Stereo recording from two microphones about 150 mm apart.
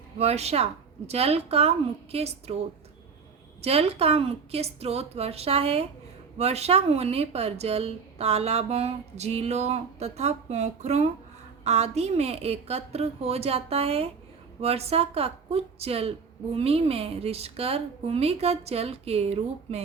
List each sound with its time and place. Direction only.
0.2 s a woman's voice: 45° right (ahead or behind)
3.6 s a woman's voice: 40° right (ahead or behind)